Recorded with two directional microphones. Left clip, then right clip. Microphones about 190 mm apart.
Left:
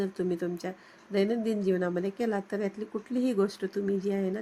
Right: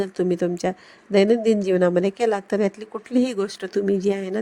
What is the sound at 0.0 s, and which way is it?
A woman's voice, 35° right (ahead or behind).